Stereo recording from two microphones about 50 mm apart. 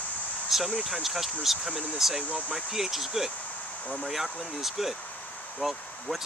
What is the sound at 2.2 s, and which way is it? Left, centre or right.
Speech, left.